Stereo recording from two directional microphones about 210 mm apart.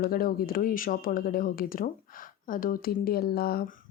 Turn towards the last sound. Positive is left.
turn(degrees=45)  # may be behind; listen again after turning